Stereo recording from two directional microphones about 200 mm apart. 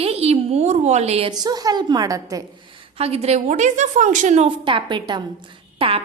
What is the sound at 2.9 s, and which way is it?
A woman's voice, 30° right (ahead or behind).